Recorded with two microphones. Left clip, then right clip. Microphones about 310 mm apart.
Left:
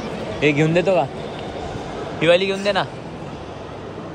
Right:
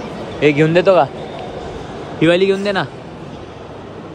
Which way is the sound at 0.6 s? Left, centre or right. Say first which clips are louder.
Right 9 dB; right.